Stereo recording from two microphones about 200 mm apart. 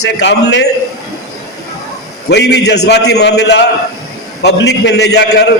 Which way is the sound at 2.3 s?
60° left (ahead or behind).